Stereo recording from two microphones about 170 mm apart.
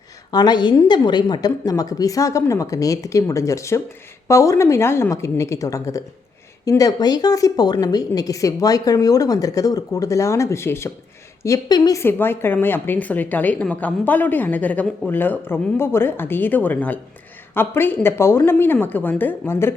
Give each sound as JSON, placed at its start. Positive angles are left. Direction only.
{"t": 0.3, "sound": "a woman's voice", "side_deg": 25}